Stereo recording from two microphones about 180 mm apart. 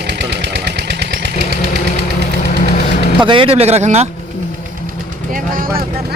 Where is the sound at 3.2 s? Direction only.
30° right (ahead or behind).